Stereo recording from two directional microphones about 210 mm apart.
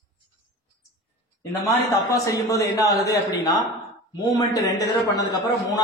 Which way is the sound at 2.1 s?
15° left (ahead or behind).